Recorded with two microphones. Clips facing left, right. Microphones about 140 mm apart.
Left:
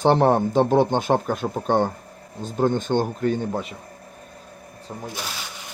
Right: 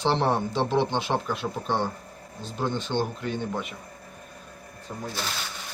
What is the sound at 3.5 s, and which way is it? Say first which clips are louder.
Speech: left 4 dB; 30° left (ahead or behind).